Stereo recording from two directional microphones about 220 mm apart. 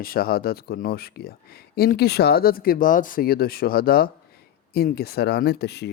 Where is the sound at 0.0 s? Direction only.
40° left (ahead or behind).